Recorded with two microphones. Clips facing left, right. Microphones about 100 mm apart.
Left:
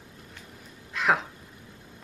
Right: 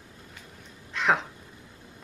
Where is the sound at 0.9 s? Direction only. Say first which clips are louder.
Even; centre (ahead or behind).